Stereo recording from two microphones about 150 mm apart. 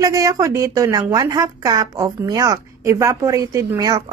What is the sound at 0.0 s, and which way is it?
Speech, 25° right (ahead or behind).